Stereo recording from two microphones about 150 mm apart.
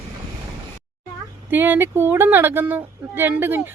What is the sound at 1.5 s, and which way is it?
Speech, 15° right (ahead or behind).